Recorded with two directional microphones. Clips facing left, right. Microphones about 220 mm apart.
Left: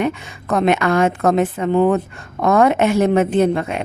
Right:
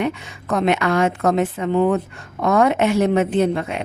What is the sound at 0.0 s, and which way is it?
Speech, 50° left (ahead or behind).